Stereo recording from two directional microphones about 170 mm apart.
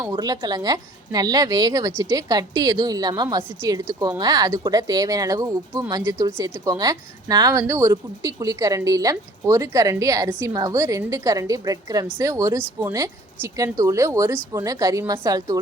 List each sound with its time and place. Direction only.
0.0 s a woman's voice: 20° right (ahead or behind)